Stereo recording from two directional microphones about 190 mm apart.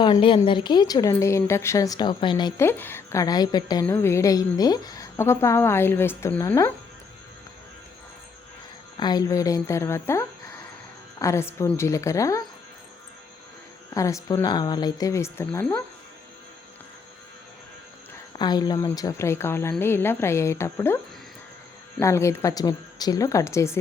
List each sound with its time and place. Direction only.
0.0 s a woman's voice: 25° left (ahead or behind)
2.6 s a woman's voice: 10° left (ahead or behind)
9.0 s a woman's voice: 20° left (ahead or behind)
13.9 s a woman's voice: 15° left (ahead or behind)
18.3 s a woman's voice: 20° left (ahead or behind)
22.0 s a woman's voice: 15° left (ahead or behind)